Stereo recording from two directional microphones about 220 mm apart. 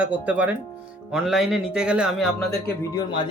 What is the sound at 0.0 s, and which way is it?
Speech, 5° right (ahead or behind).